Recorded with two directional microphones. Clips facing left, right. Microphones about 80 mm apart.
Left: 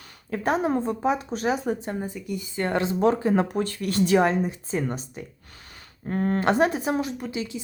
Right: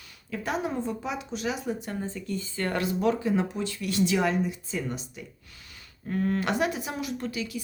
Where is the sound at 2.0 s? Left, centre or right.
Centre; by 7.1 s left.